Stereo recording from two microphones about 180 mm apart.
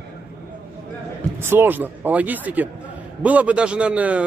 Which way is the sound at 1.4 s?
10° right (ahead or behind).